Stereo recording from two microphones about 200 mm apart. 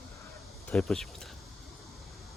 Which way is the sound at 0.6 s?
Centre (ahead or behind).